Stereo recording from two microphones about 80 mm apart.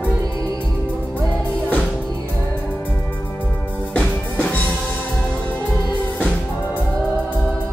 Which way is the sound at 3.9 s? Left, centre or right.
Centre.